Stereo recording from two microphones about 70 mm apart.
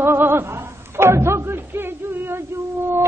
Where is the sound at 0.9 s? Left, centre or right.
Right.